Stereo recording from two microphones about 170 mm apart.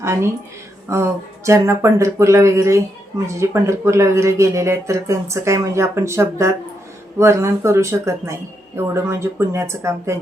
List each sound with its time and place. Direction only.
0.0 s speech: 15° right (ahead or behind)